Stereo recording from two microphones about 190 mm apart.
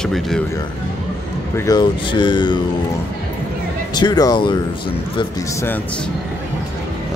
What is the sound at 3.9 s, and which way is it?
Speech, 20° left (ahead or behind).